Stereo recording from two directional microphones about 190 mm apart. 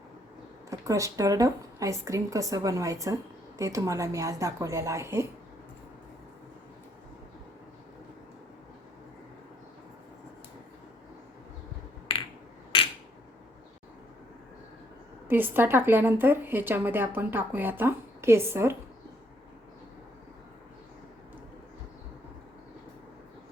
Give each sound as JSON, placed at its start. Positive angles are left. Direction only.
{"t": 0.7, "sound": "a woman's voice", "side_deg": -15}
{"t": 15.3, "sound": "a woman's voice", "side_deg": -10}